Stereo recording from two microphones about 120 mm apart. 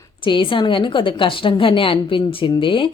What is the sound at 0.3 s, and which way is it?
A woman's voice, 45° left (ahead or behind).